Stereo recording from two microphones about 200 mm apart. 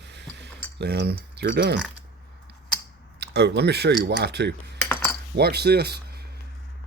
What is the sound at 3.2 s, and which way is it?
Speech, 55° right (ahead or behind).